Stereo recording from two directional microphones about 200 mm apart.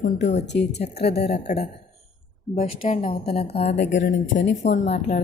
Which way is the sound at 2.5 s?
35° left (ahead or behind).